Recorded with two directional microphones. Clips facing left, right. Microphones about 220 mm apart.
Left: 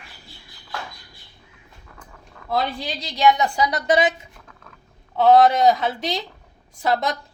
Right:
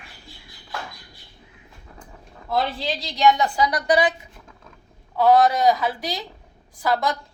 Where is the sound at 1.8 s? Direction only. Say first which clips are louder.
Right 2 dB; 25° right (ahead or behind).